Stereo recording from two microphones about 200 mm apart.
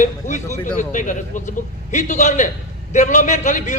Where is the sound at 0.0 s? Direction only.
35° left (ahead or behind).